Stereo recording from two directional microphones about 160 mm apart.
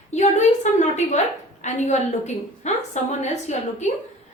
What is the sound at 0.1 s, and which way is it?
A woman's voice, 45° left (ahead or behind).